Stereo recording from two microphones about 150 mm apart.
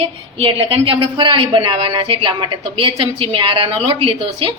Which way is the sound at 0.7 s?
35° right (ahead or behind).